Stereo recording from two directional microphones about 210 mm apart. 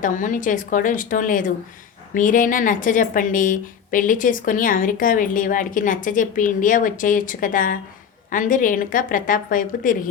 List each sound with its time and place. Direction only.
0.0 s a woman's voice: 40° left (ahead or behind)